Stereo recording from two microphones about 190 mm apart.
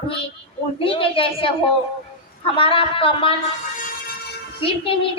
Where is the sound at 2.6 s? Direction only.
30° left (ahead or behind).